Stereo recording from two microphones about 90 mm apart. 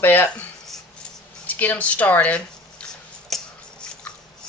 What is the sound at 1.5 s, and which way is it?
Speech, 20° left (ahead or behind).